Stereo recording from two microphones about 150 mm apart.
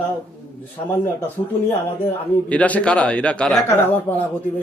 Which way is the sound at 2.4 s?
10° left (ahead or behind).